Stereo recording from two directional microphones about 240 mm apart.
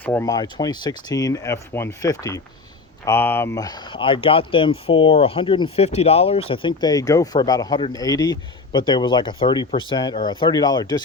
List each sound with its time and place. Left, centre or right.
0.0 s speech: centre